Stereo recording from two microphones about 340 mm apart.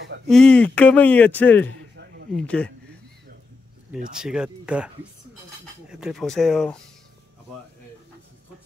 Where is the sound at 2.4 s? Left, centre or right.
Centre.